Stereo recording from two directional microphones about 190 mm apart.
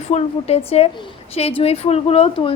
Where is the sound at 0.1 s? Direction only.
35° left (ahead or behind).